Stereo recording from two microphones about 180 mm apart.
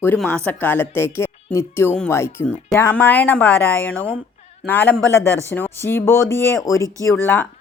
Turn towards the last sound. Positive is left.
turn(degrees=15)  # may be behind; listen again after turning